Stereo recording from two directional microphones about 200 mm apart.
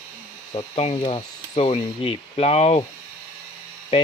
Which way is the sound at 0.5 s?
30° left (ahead or behind).